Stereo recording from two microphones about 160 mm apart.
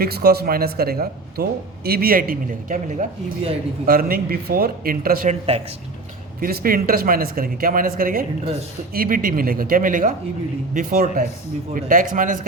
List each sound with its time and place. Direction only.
0.0 s a man's voice: 75° right (ahead or behind)
5.3 s speech: 40° right (ahead or behind)
6.4 s speech: 65° right (ahead or behind)